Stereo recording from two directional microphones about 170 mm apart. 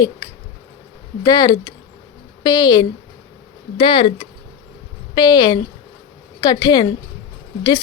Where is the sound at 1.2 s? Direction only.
25° left (ahead or behind).